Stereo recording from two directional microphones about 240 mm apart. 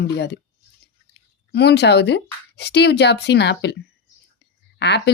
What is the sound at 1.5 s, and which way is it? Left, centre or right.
Speech, left.